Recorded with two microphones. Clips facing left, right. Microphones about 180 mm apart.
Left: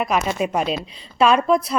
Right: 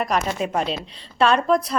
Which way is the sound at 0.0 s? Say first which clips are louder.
Left 2 dB; 5° left (ahead or behind).